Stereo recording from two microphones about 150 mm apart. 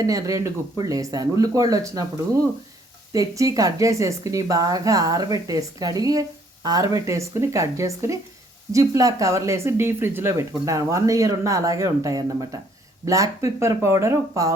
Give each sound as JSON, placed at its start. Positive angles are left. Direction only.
{"t": 0.0, "sound": "speech", "side_deg": -25}